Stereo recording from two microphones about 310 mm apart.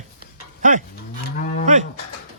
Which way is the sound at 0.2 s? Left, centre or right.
Right.